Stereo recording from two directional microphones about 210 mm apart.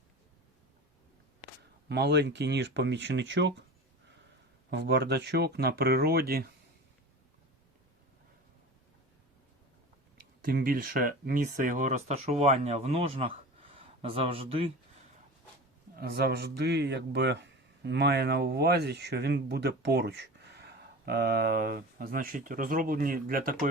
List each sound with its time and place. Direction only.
1.9 s speech: 55° right (ahead or behind)
4.7 s speech: 55° right (ahead or behind)
10.4 s speech: 45° right (ahead or behind); by 14.7 s 25° right (ahead or behind)
16.0 s speech: 50° right (ahead or behind)